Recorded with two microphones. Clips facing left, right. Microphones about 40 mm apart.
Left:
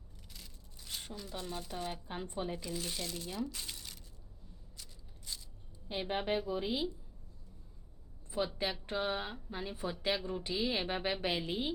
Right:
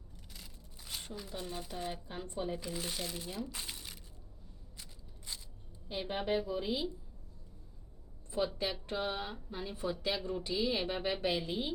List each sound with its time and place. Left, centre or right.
0.9 s a sound: centre
1.4 s speech: centre
2.0 s speech: centre
2.6 s speech: centre
3.5 s a sound: centre
4.8 s scissors: right
5.9 s speech: centre
8.3 s speech: centre